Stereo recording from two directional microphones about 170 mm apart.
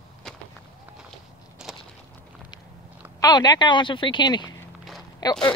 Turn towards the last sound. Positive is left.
turn(degrees=20)  # may be behind; listen again after turning